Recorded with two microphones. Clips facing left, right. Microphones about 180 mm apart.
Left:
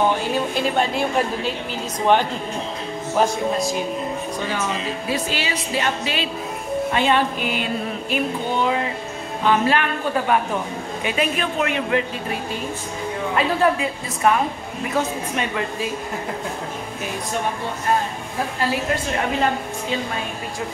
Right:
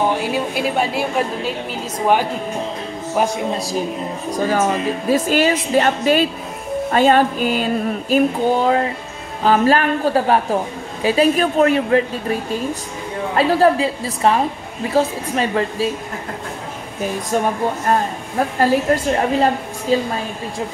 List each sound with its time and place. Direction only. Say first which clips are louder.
0.2 s a woman's voice: right 1 dB; 5° right (ahead or behind)
3.2 s a woman's voice: right 1 dB; 10° right (ahead or behind)
3.5 s a woman's voice: right 1 dB; 35° right (ahead or behind)
13.4 s a woman's voice: right 6 dB; 35° right (ahead or behind)
18.6 s a woman's voice: right 8 dB; 40° right (ahead or behind)